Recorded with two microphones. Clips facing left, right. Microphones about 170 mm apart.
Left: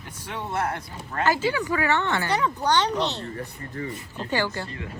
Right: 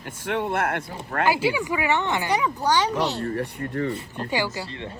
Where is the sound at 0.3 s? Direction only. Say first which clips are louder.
Right 4 dB; 60° right (ahead or behind).